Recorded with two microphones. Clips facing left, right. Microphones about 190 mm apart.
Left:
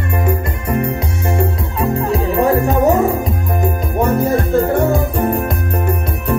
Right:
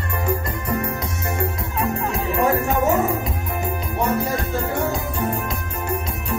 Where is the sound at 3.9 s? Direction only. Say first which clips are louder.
Left 7 dB; 50° left (ahead or behind).